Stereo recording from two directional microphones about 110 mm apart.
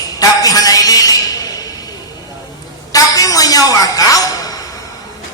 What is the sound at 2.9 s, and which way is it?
A woman's voice, 30° left (ahead or behind).